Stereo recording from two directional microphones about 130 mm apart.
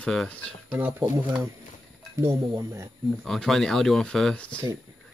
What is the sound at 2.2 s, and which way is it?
Speech, 20° right (ahead or behind).